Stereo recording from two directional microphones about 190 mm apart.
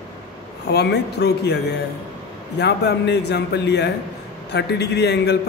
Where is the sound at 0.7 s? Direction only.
60° left (ahead or behind).